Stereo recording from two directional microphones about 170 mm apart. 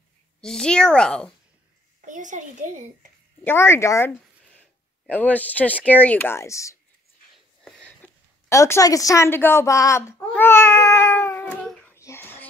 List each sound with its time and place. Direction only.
0.4 s a woman's voice: 5° left (ahead or behind)
2.0 s a child's voice: 50° right (ahead or behind)
3.4 s a woman's voice: 15° left (ahead or behind)
5.1 s a woman's voice: 10° left (ahead or behind)
8.5 s a woman's voice: 15° left (ahead or behind)
11.6 s child singing: 5° left (ahead or behind)
11.9 s child singing: 15° left (ahead or behind)